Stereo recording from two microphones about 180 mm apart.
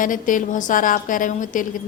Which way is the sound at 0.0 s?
45° left (ahead or behind).